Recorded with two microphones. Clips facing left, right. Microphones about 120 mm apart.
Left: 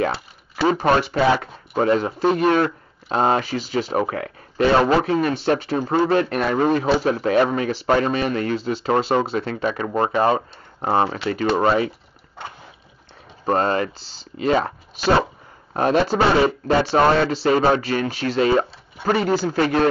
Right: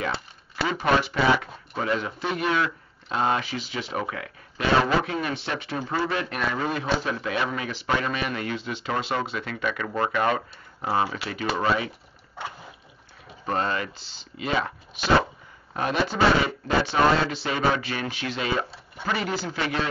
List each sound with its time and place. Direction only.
0.7 s speech: 40° left (ahead or behind)
13.5 s speech: 40° left (ahead or behind)